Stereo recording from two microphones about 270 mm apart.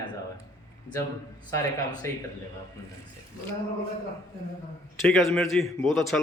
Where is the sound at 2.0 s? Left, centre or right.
Centre.